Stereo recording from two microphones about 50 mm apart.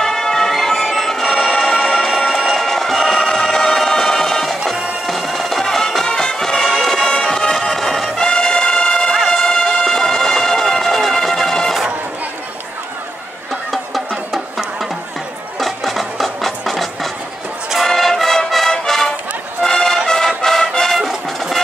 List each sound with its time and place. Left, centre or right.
0.0 s music: centre
13.7 s music: centre
15.6 s a sound: centre
17.8 s music: centre